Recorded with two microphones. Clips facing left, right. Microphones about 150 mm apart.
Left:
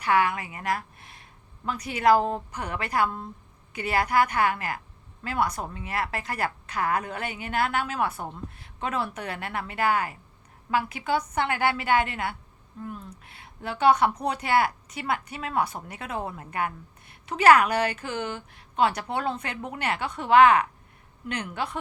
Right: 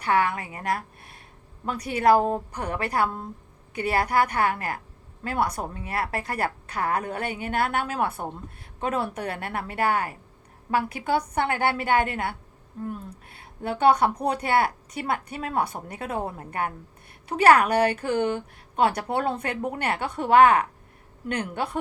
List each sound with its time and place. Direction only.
0.0 s speech: 40° right (ahead or behind)
1.9 s a woman's voice: 45° right (ahead or behind)
5.2 s speech: 50° right (ahead or behind)
5.5 s a woman's voice: 35° right (ahead or behind)
17.3 s a woman's voice: 45° right (ahead or behind)